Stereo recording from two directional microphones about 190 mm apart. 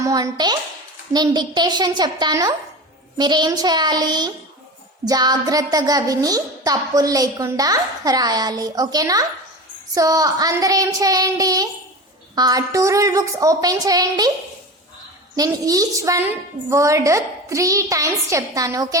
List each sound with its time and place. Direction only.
0.0 s speech: 20° right (ahead or behind)
15.4 s a woman's voice: 20° right (ahead or behind)